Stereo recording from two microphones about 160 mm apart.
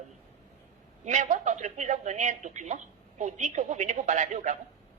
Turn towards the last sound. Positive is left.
turn(degrees=-50)  # may be behind; listen again after turning